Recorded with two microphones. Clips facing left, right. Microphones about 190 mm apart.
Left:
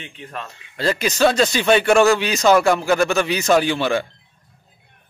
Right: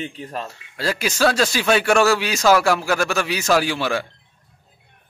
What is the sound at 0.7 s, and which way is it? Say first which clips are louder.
Speech: left 3 dB; 5° right (ahead or behind).